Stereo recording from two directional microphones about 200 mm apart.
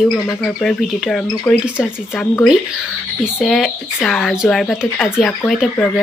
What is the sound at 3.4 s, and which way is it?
Speech, centre (ahead or behind).